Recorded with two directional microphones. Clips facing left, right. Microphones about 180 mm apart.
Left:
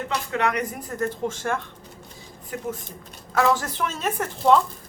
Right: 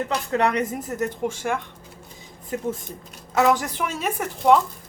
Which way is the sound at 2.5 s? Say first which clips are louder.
Right 4 dB; 25° right (ahead or behind).